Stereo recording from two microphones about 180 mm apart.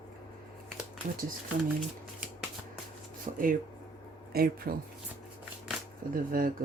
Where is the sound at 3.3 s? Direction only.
35° right (ahead or behind).